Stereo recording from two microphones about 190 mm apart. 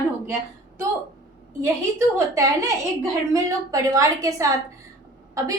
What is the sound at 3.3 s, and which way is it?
A woman's voice, 15° right (ahead or behind).